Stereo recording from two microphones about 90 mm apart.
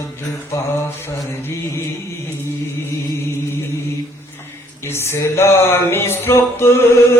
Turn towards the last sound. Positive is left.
turn(degrees=30)  # may be behind; listen again after turning